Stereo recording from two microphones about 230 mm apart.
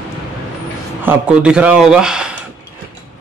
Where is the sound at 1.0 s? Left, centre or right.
Centre.